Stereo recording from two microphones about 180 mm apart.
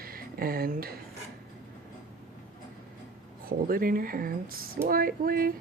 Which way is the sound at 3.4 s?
55° right (ahead or behind).